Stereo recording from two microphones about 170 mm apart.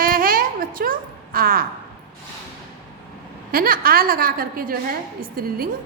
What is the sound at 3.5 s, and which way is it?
A woman's voice, 60° right (ahead or behind).